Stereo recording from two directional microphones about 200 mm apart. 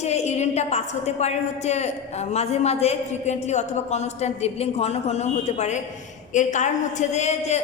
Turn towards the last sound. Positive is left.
turn(degrees=35)  # may be behind; listen again after turning